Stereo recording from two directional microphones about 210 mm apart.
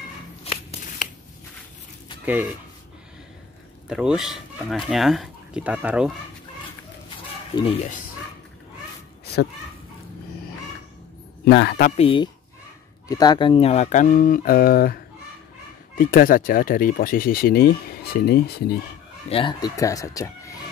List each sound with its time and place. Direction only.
0.4 s shuffling cards: 30° left (ahead or behind)
2.2 s speech: 10° right (ahead or behind)
3.9 s speech: 5° right (ahead or behind)
7.5 s speech: 30° left (ahead or behind)
9.2 s a sound: 50° left (ahead or behind)
11.4 s speech: 55° left (ahead or behind)
12.0 s speech: 25° left (ahead or behind); by 15.0 s 45° left (ahead or behind)
16.0 s speech: 40° left (ahead or behind)
19.2 s speech: 25° left (ahead or behind)